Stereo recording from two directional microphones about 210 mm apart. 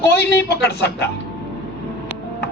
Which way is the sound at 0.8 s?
50° left (ahead or behind).